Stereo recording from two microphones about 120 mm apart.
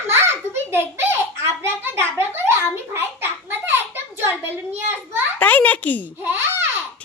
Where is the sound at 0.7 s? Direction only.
20° right (ahead or behind).